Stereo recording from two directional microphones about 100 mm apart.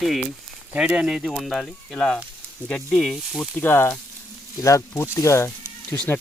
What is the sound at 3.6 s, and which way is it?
Speech, 25° left (ahead or behind).